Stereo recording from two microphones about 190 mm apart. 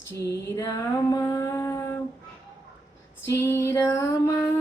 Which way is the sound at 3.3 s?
15° left (ahead or behind).